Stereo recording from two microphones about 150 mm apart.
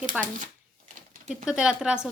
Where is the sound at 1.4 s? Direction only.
5° right (ahead or behind).